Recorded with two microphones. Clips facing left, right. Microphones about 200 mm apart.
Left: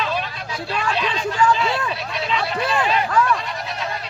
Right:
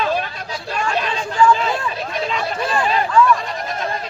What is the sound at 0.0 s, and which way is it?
Hubbub, 45° right (ahead or behind).